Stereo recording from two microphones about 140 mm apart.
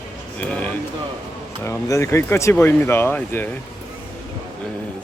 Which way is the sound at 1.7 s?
20° left (ahead or behind).